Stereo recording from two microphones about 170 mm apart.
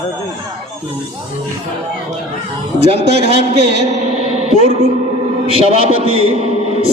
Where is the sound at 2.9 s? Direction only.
35° right (ahead or behind).